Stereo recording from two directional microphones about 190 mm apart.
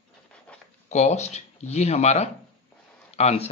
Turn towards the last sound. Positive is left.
turn(degrees=35)  # may be behind; listen again after turning